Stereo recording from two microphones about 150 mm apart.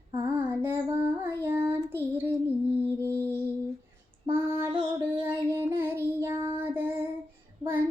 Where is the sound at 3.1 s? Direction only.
15° left (ahead or behind).